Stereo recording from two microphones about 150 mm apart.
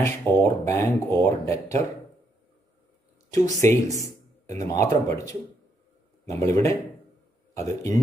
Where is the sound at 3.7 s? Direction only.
20° left (ahead or behind).